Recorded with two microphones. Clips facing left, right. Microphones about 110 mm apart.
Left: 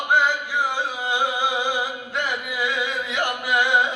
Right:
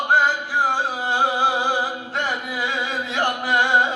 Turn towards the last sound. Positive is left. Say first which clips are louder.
# right 2 dB
turn(degrees=-35)  # may be behind; listen again after turning